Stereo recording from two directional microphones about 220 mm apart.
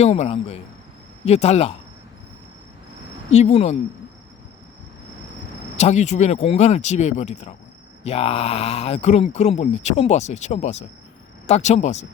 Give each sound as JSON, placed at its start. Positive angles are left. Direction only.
{"t": 0.0, "sound": "speech", "side_deg": 30}
{"t": 3.3, "sound": "speech", "side_deg": 30}
{"t": 5.7, "sound": "speech", "side_deg": 30}